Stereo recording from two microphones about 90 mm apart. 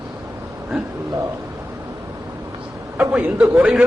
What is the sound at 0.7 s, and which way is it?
Speech, 5° right (ahead or behind).